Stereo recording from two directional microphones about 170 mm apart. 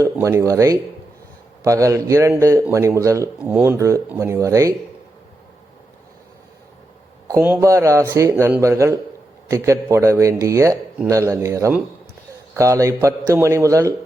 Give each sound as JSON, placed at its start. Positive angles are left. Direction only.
{"t": 0.0, "sound": "speech", "side_deg": -15}
{"t": 7.3, "sound": "speech", "side_deg": -15}